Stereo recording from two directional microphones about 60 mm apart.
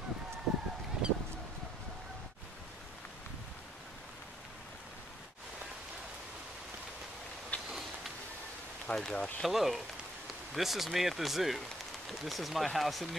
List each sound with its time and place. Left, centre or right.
1.0 s goose: centre
7.5 s a sound: left
8.8 s speech: centre
9.5 s speech: centre